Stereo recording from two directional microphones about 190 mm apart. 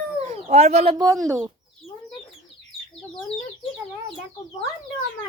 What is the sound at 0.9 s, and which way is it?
Speech, 20° right (ahead or behind).